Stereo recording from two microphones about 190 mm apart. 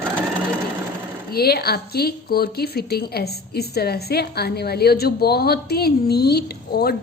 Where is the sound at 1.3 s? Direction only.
55° left (ahead or behind).